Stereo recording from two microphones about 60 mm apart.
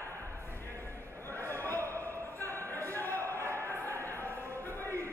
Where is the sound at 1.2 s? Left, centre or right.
Left.